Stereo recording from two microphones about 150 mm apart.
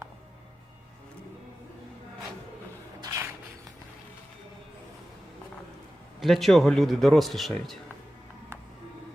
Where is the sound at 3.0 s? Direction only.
20° right (ahead or behind).